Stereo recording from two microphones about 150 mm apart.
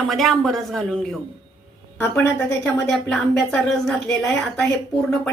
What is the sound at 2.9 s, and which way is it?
A woman's voice, 5° left (ahead or behind).